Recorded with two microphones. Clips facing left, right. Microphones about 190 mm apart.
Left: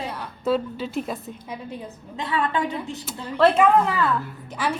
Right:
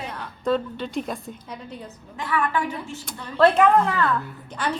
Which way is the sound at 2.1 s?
20° left (ahead or behind).